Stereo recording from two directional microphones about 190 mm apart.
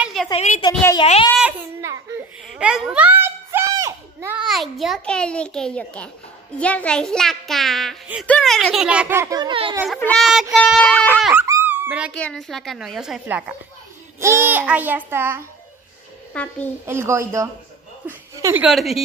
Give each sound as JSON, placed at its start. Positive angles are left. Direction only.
{"t": 0.0, "sound": "a sound", "side_deg": 0}
{"t": 0.3, "sound": "a child's voice", "side_deg": 30}
{"t": 0.7, "sound": "a woman's voice", "side_deg": 20}
{"t": 1.4, "sound": "a sound", "side_deg": -15}
{"t": 2.4, "sound": "a sound", "side_deg": -5}
{"t": 4.4, "sound": "a child's voice", "side_deg": 0}
{"t": 9.9, "sound": "a child's voice", "side_deg": 5}
{"t": 12.2, "sound": "a child's voice", "side_deg": 5}
{"t": 16.3, "sound": "a child's voice", "side_deg": 5}
{"t": 16.8, "sound": "a child's voice", "side_deg": -15}
{"t": 18.0, "sound": "a sound", "side_deg": -10}
{"t": 18.7, "sound": "a child's voice", "side_deg": 0}